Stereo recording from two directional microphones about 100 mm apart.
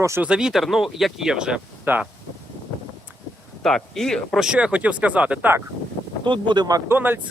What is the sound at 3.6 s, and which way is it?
Speech, 5° left (ahead or behind).